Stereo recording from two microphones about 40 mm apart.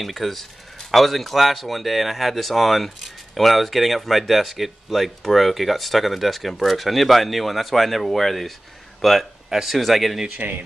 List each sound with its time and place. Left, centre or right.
0.0 s speech: centre